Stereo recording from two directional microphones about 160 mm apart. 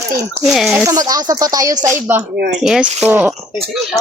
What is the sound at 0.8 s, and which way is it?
Speech, 25° right (ahead or behind).